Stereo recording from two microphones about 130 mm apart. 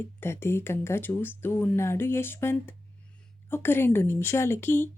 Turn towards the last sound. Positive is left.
turn(degrees=20)  # may be behind; listen again after turning